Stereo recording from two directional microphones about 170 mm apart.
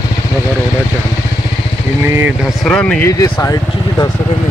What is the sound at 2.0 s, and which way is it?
Speech, 15° right (ahead or behind).